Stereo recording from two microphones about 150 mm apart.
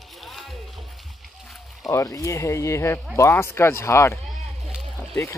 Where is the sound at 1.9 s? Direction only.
20° left (ahead or behind).